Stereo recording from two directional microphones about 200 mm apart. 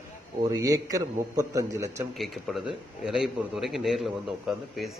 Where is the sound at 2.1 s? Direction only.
Centre (ahead or behind).